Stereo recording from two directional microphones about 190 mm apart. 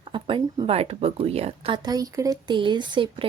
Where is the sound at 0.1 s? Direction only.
25° right (ahead or behind).